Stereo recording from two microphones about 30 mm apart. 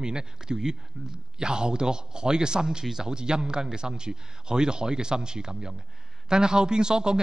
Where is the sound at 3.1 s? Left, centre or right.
Right.